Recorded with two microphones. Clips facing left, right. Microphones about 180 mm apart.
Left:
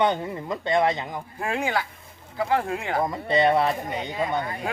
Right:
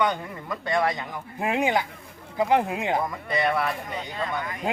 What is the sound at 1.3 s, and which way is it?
A woman's voice, 20° right (ahead or behind).